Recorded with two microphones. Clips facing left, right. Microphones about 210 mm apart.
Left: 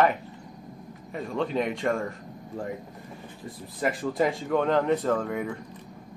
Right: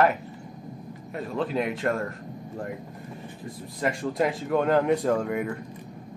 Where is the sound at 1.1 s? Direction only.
Centre (ahead or behind).